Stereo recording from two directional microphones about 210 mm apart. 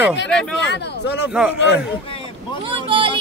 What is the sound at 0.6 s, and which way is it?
Speech, 55° left (ahead or behind).